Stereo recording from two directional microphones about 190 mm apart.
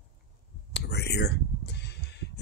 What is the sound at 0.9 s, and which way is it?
Music, 60° left (ahead or behind).